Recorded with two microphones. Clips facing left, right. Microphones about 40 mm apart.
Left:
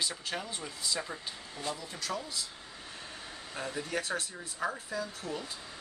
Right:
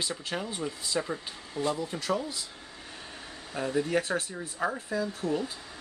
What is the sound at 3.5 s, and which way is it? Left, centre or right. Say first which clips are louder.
Speech: right 8 dB; centre.